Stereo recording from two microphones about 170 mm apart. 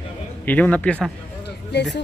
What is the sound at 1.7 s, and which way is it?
Speech, 90° left.